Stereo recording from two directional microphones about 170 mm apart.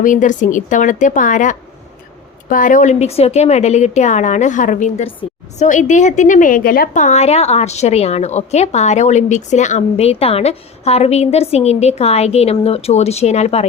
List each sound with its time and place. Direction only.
0.0 s a woman's voice: 50° left (ahead or behind)